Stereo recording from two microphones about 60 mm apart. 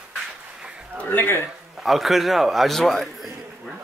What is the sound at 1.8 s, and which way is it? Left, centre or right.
Speech, centre.